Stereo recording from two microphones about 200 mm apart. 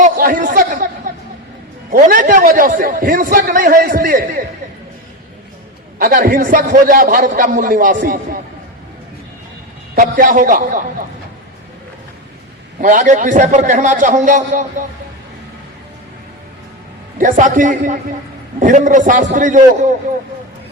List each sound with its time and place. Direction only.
0.0 s a sound: 40° right (ahead or behind)
1.9 s a man's voice: 45° right (ahead or behind)
6.0 s a man's voice: 45° right (ahead or behind)
9.9 s a man's voice: 45° right (ahead or behind)
12.8 s a man's voice: 40° right (ahead or behind)
17.2 s a man's voice: 40° right (ahead or behind)